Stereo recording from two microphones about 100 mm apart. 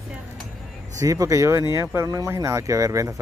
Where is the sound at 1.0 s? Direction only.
35° right (ahead or behind).